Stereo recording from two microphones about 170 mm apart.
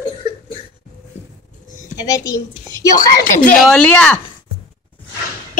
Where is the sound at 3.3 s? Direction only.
50° left (ahead or behind).